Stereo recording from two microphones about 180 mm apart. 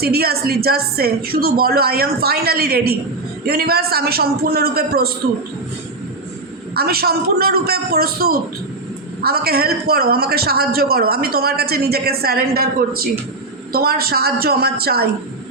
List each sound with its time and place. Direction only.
0.0 s a woman's voice: 60° right (ahead or behind)
6.7 s a woman's voice: 60° right (ahead or behind)